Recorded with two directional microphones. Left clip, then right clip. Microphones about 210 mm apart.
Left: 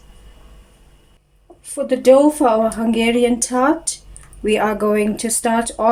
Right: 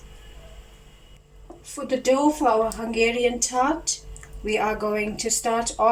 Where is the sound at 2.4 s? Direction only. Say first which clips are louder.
Left 6 dB; 45° left (ahead or behind).